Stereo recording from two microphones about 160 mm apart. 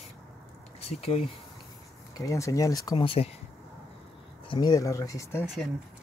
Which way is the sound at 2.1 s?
20° left (ahead or behind).